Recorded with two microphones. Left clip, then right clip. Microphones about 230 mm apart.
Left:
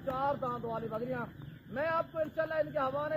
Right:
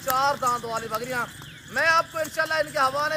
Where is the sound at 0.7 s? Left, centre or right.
Right.